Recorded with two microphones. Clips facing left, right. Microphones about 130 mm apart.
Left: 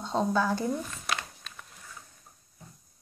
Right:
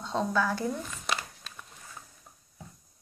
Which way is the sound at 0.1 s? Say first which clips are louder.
Left 2 dB; 30° left (ahead or behind).